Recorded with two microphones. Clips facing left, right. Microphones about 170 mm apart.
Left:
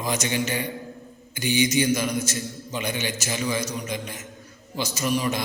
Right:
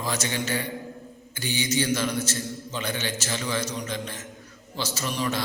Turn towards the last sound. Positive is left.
turn(degrees=10)  # may be behind; listen again after turning